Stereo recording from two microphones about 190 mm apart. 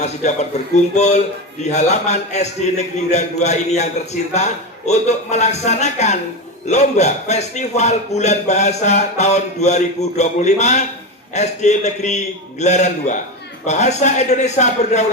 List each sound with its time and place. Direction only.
0.0 s a man's voice: 35° left (ahead or behind)